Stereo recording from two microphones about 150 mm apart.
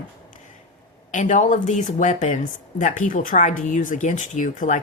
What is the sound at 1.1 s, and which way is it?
Speech, 55° left (ahead or behind).